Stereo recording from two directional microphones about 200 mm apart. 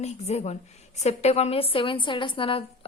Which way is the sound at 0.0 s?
35° left (ahead or behind).